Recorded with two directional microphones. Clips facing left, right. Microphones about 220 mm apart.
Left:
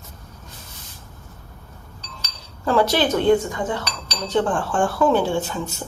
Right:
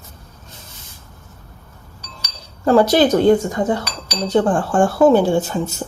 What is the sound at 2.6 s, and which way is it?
A woman's voice, 40° right (ahead or behind).